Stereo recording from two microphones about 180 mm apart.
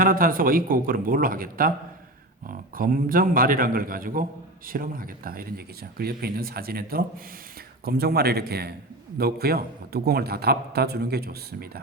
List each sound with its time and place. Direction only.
0.0 s a man's voice: 50° right (ahead or behind)